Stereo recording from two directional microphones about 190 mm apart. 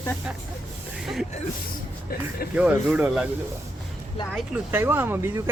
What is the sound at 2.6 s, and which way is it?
Speech, 5° right (ahead or behind).